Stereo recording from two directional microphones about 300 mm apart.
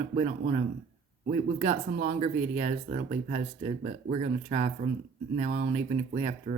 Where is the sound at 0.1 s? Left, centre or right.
Right.